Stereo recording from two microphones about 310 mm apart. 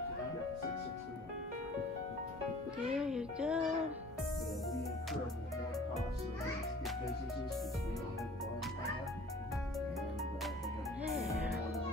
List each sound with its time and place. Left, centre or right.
2.9 s music: centre